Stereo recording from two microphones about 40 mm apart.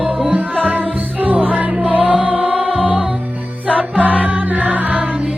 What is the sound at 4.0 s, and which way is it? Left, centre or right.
Music, right.